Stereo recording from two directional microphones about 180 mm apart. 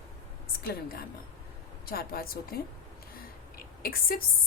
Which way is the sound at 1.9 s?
55° left (ahead or behind).